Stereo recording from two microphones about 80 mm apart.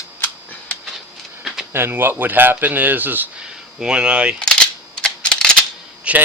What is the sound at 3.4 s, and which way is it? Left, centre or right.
Speech, centre.